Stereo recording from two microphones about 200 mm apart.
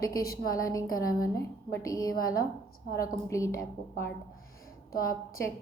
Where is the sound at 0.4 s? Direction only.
45° left (ahead or behind).